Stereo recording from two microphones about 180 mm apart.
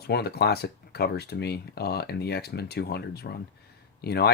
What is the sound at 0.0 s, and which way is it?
Speech, 60° left (ahead or behind).